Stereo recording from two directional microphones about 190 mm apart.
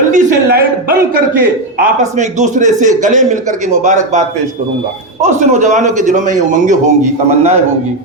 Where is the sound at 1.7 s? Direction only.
50° right (ahead or behind).